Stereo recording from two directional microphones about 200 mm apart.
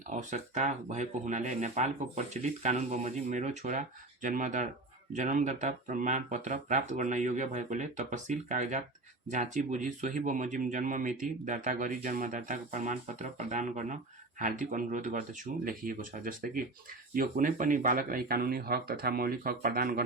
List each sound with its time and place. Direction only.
0.1 s speech: 40° right (ahead or behind)